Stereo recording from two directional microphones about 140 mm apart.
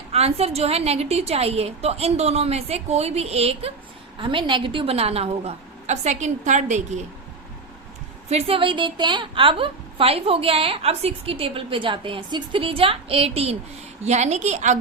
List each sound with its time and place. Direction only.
0.1 s a woman's voice: 45° right (ahead or behind)
8.3 s a woman's voice: 45° right (ahead or behind)